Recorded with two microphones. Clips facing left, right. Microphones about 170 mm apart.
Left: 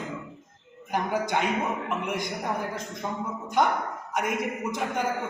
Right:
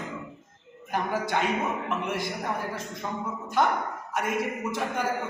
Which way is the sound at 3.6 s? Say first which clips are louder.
Left 1 dB; 20° left (ahead or behind).